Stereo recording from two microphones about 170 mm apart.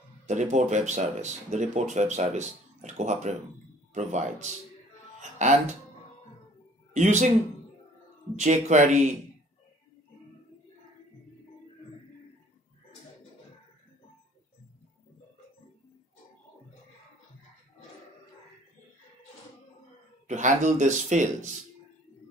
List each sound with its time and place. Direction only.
0.3 s speech: 45° right (ahead or behind)
6.9 s speech: 45° right (ahead or behind)
8.4 s speech: 45° right (ahead or behind)
20.2 s speech: 45° right (ahead or behind)